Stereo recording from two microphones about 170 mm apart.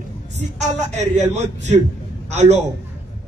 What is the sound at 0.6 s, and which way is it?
A man's voice, 40° right (ahead or behind).